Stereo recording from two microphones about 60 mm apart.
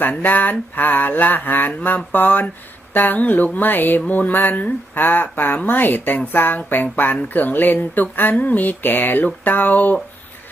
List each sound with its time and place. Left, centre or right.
0.0 s speech: left